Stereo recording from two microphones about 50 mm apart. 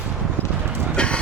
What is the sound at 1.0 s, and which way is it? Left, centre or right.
Train, centre.